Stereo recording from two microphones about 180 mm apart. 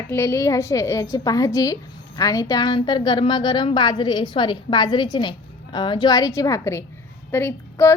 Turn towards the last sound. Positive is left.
turn(degrees=15)  # may be behind; listen again after turning